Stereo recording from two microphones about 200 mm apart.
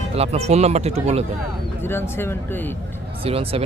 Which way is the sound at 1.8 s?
10° left (ahead or behind).